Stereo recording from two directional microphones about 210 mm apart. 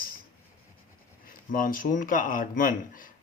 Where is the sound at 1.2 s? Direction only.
40° left (ahead or behind).